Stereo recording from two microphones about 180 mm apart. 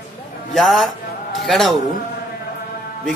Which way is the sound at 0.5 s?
Centre (ahead or behind).